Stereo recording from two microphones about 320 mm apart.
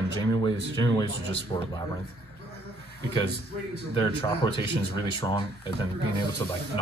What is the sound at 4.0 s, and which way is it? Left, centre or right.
Speech, centre.